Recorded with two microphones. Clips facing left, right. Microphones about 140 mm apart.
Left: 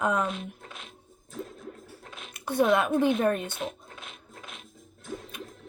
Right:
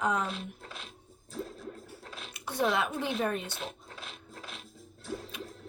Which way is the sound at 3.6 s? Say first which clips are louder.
Left 5 dB; 35° right (ahead or behind).